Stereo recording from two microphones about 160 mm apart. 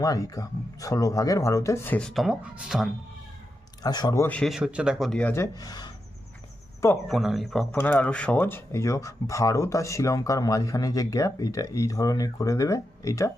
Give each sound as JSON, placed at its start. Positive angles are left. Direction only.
{"t": 0.0, "sound": "speech", "side_deg": 20}
{"t": 3.8, "sound": "speech", "side_deg": 25}
{"t": 4.4, "sound": "speech", "side_deg": 0}
{"t": 7.1, "sound": "speech", "side_deg": 0}